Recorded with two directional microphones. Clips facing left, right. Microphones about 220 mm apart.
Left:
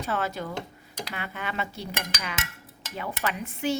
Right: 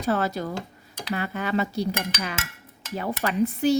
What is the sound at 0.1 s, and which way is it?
Dishes, 40° right (ahead or behind).